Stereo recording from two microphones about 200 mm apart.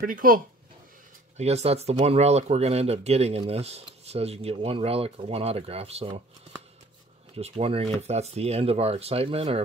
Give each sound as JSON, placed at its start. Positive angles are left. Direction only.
{"t": 0.0, "sound": "speech", "side_deg": -45}
{"t": 1.3, "sound": "speech", "side_deg": -30}
{"t": 7.3, "sound": "speech", "side_deg": -30}